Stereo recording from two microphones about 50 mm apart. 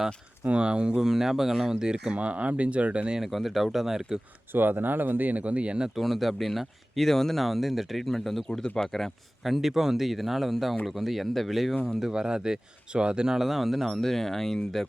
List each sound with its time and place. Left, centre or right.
0.4 s speech: right
2.1 s speech: right
3.2 s speech: centre
4.5 s speech: right
5.9 s speech: centre
9.4 s speech: centre